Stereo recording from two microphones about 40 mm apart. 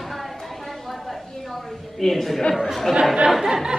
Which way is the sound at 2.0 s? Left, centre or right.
Centre.